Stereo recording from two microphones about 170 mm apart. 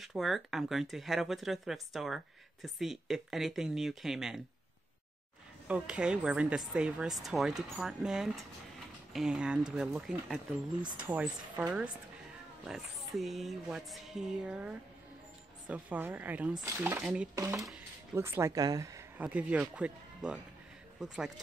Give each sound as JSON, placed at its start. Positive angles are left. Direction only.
{"t": 0.0, "sound": "speech", "side_deg": 0}
{"t": 5.7, "sound": "speech", "side_deg": -5}
{"t": 17.4, "sound": "speech", "side_deg": -20}